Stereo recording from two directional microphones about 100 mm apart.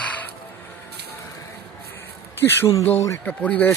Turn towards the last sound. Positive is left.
turn(degrees=15)  # may be behind; listen again after turning